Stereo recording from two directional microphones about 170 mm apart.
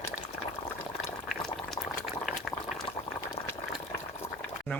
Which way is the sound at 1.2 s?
Centre (ahead or behind).